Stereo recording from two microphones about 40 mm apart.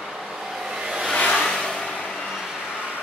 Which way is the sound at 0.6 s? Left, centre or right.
Centre.